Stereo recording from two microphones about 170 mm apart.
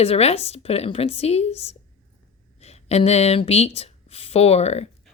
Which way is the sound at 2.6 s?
40° left (ahead or behind).